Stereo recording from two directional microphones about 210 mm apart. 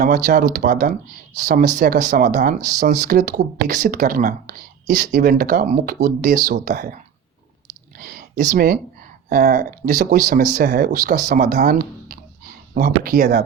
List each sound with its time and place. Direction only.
0.0 s speech: 50° right (ahead or behind)
2.6 s speech: 15° right (ahead or behind)
2.8 s speech: 45° right (ahead or behind)